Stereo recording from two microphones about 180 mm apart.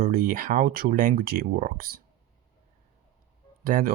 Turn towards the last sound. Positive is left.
turn(degrees=-55)  # may be behind; listen again after turning